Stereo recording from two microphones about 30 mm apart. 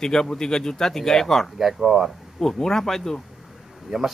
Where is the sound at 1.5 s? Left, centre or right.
Centre.